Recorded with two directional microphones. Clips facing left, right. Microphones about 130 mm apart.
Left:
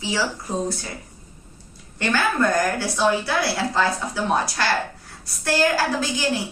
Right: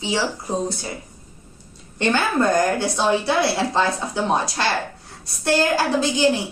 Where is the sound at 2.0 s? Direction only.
25° right (ahead or behind).